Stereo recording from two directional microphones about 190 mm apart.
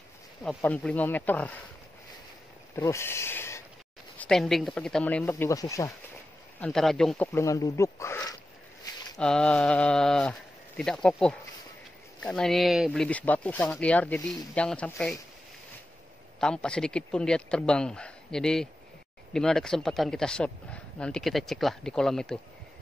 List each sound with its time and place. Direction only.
0.4 s speech: 5° left (ahead or behind)
2.7 s speech: 15° left (ahead or behind)
4.2 s speech: centre (ahead or behind)
5.3 s speech: 15° left (ahead or behind)
6.6 s speech: centre (ahead or behind)
7.3 s speech: 15° left (ahead or behind)
9.2 s speech: 5° left (ahead or behind)
16.3 s speech: 5° left (ahead or behind)